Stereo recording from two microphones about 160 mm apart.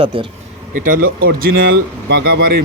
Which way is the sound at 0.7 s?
60° right (ahead or behind).